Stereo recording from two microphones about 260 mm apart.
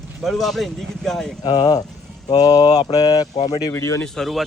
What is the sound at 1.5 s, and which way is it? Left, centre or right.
A man's voice, centre.